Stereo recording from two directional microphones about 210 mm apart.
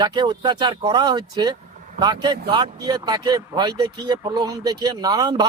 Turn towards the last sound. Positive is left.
turn(degrees=-20)  # may be behind; listen again after turning